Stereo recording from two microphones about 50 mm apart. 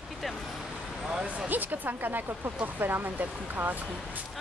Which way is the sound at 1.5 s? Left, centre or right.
Right.